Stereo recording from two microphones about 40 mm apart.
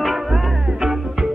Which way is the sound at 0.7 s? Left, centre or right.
Centre.